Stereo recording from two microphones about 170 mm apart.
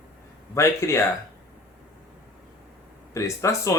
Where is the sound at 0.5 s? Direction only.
15° left (ahead or behind).